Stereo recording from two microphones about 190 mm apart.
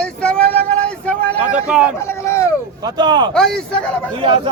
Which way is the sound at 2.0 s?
15° left (ahead or behind).